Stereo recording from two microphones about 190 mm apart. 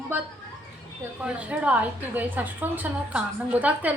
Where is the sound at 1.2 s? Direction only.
5° right (ahead or behind).